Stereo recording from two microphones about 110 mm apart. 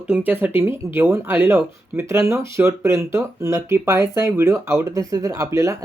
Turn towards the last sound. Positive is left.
turn(degrees=-30)  # may be behind; listen again after turning